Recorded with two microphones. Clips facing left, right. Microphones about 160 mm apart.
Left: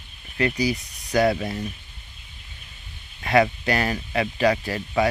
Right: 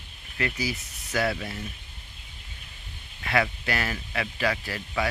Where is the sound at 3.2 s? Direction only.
25° left (ahead or behind).